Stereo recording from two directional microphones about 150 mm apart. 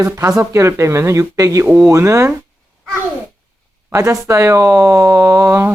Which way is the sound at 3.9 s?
20° right (ahead or behind).